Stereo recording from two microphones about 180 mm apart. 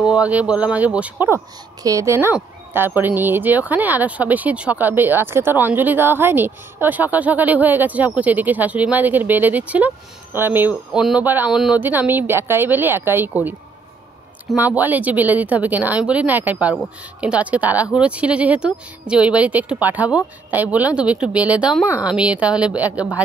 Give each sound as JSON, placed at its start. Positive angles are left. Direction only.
{"t": 0.0, "sound": "speech", "side_deg": -5}